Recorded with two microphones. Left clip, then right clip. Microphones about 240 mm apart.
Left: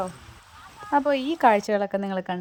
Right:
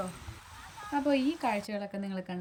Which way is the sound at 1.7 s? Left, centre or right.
Left.